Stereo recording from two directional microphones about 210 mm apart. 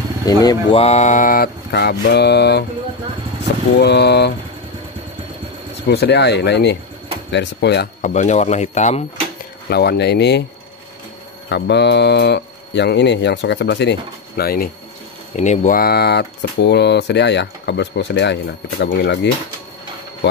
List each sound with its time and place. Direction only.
0.2 s speech: 15° left (ahead or behind); by 2.6 s 50° left (ahead or behind)
3.7 s speech: 55° left (ahead or behind)
5.9 s speech: 50° left (ahead or behind)
8.0 s speech: 35° left (ahead or behind)
9.7 s speech: 50° left (ahead or behind)
11.4 s speech: 55° left (ahead or behind)
15.3 s speech: 35° left (ahead or behind); by 19.1 s 55° left (ahead or behind)